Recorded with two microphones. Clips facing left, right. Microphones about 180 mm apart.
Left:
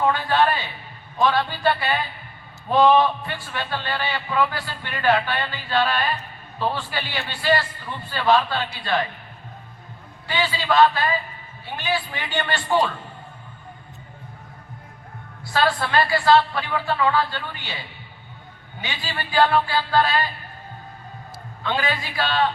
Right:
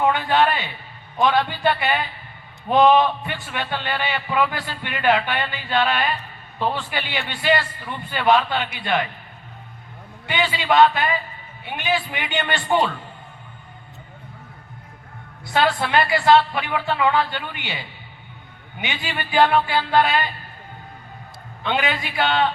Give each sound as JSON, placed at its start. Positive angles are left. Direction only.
{"t": 0.0, "sound": "a man's voice", "side_deg": -20}
{"t": 10.2, "sound": "a man's voice", "side_deg": -20}
{"t": 15.5, "sound": "speech", "side_deg": -20}
{"t": 18.8, "sound": "speech", "side_deg": -20}
{"t": 21.6, "sound": "speech", "side_deg": -20}